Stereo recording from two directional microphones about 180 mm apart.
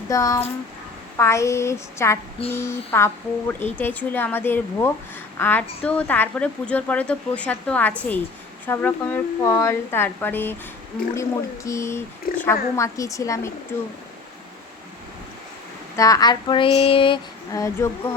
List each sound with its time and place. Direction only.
0.1 s child singing: 20° left (ahead or behind)
1.1 s speech: 15° left (ahead or behind)
12.3 s speech: 55° left (ahead or behind)
12.7 s speech: 15° left (ahead or behind)
16.0 s child singing: 20° left (ahead or behind)